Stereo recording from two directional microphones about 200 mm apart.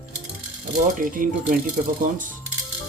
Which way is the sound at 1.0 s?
45° right (ahead or behind).